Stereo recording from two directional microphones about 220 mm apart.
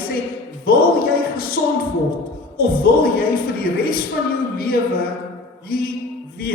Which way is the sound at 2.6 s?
45° left (ahead or behind).